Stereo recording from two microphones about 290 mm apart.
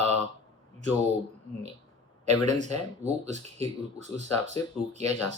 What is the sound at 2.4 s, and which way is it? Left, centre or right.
Speech, right.